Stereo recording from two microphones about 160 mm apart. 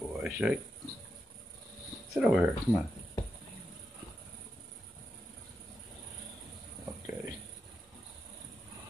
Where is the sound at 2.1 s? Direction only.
5° right (ahead or behind).